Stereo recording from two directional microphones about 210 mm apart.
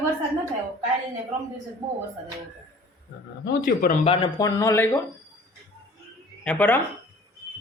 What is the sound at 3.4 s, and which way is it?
Speech, 45° left (ahead or behind).